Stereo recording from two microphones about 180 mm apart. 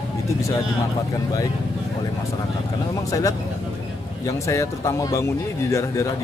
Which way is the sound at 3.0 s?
20° left (ahead or behind).